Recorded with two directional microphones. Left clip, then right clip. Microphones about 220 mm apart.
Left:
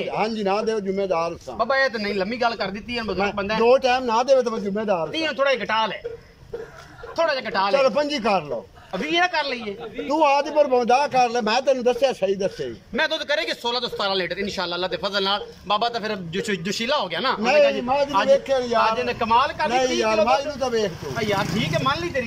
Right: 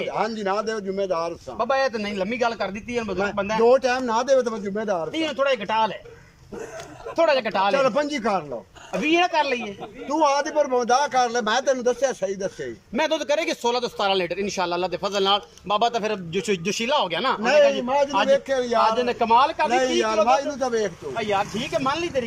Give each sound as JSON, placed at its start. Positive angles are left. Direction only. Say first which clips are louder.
{"t": 0.0, "sound": "a man's voice", "louder": "left 1 dB", "side_deg": 5}
{"t": 1.6, "sound": "a man's voice", "louder": "left 1 dB", "side_deg": -10}
{"t": 5.1, "sound": "a man's voice", "louder": "left 1 dB", "side_deg": -5}
{"t": 7.2, "sound": "a man's voice", "louder": "right 2 dB", "side_deg": -15}
{"t": 7.7, "sound": "a man's voice", "louder": "left 2 dB", "side_deg": 0}
{"t": 9.0, "sound": "a man's voice", "louder": "right 1 dB", "side_deg": -10}
{"t": 10.0, "sound": "a man's voice", "louder": "left 2 dB", "side_deg": 5}
{"t": 12.9, "sound": "a man's voice", "louder": "even", "side_deg": -10}
{"t": 18.8, "sound": "a man's voice", "louder": "right 1 dB", "side_deg": -15}
{"t": 19.7, "sound": "a man's voice", "louder": "left 1 dB", "side_deg": 0}
{"t": 21.2, "sound": "a man's voice", "louder": "even", "side_deg": -10}